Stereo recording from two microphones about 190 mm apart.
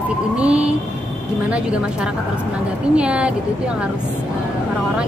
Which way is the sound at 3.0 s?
5° right (ahead or behind).